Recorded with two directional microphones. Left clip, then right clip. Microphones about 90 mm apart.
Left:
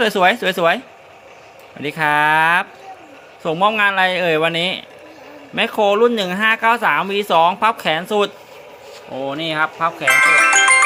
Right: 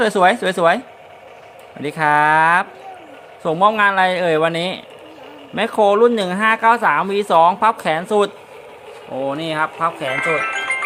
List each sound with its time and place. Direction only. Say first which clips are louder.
0.0 s speech: even; 10° right (ahead or behind)
1.8 s speech: right 1 dB; 10° right (ahead or behind)